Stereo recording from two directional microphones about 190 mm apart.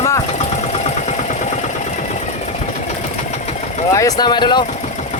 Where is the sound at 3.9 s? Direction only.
20° left (ahead or behind).